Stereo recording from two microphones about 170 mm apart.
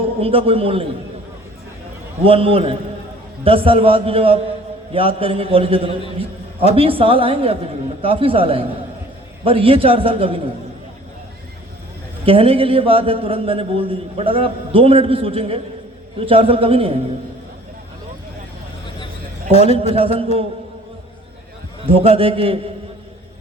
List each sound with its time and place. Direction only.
0.2 s a man's voice: 35° right (ahead or behind)
2.2 s a man's voice: 35° right (ahead or behind)
12.2 s a man's voice: 35° right (ahead or behind)
19.9 s a man's voice: 35° right (ahead or behind)
21.8 s a man's voice: 35° right (ahead or behind)